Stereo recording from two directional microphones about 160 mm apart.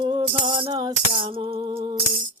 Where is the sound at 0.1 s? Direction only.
30° right (ahead or behind).